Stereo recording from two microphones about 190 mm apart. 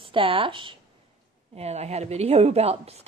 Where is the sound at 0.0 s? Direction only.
30° right (ahead or behind).